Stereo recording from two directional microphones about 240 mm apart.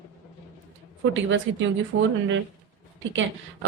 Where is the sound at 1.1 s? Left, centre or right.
Right.